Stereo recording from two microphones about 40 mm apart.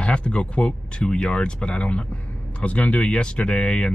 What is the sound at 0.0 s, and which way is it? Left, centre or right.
Speech, left.